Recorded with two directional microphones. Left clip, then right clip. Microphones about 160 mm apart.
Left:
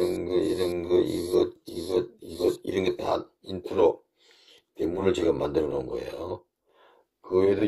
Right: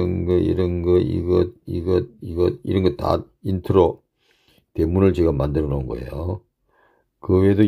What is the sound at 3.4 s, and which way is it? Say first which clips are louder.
Speech: right 6 dB; 15° right (ahead or behind).